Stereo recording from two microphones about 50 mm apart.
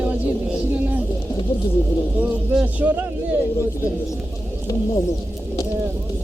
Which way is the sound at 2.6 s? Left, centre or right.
Right.